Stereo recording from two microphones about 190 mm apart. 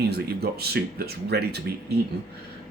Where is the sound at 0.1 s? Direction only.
55° right (ahead or behind).